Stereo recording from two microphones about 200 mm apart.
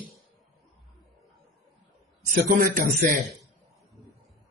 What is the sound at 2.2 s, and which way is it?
Speech, 40° right (ahead or behind).